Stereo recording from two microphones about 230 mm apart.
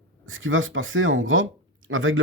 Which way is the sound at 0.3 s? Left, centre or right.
Right.